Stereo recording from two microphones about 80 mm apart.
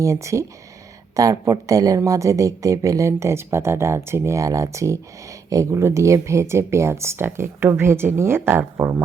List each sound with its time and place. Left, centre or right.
0.0 s speech: right